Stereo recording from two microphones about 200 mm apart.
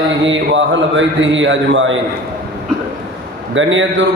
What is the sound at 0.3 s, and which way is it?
A man's voice, 70° right (ahead or behind).